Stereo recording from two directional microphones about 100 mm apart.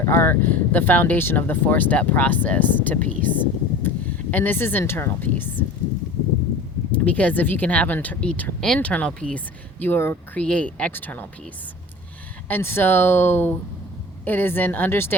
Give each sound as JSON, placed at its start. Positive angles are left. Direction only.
{"t": 0.0, "sound": "speech", "side_deg": 25}
{"t": 6.9, "sound": "speech", "side_deg": 15}
{"t": 10.4, "sound": "speech", "side_deg": 10}
{"t": 12.5, "sound": "speech", "side_deg": 20}